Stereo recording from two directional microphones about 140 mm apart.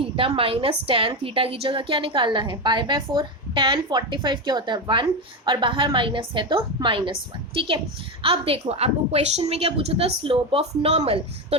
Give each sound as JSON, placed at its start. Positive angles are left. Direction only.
{"t": 0.0, "sound": "a woman's voice", "side_deg": -40}